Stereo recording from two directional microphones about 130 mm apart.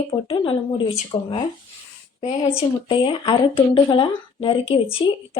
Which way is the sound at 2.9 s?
35° left (ahead or behind).